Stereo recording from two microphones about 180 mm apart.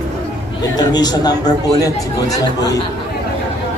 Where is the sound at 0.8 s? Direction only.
20° left (ahead or behind).